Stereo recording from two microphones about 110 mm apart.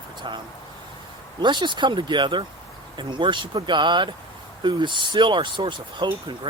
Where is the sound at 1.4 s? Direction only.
45° right (ahead or behind).